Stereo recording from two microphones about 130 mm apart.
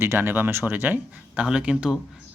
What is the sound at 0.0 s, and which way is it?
Speech, 20° right (ahead or behind).